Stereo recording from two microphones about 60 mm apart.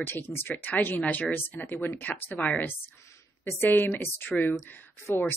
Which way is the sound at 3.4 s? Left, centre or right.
Left.